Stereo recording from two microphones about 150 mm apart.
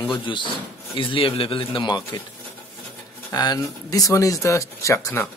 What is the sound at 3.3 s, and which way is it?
A man's voice, 25° left (ahead or behind).